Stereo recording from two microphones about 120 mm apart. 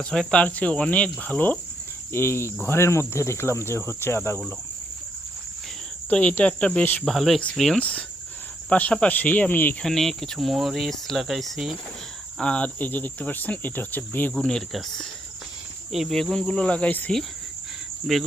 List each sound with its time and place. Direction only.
0.0 s speech: 5° left (ahead or behind)
6.1 s speech: 10° left (ahead or behind)
7.0 s speech: centre (ahead or behind)
9.8 s speech: 5° left (ahead or behind)
14.3 s speech: 5° left (ahead or behind)
18.0 s speech: centre (ahead or behind)